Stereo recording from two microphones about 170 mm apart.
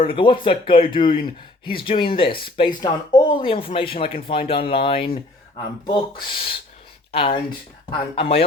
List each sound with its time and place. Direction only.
0.0 s speech: 30° left (ahead or behind)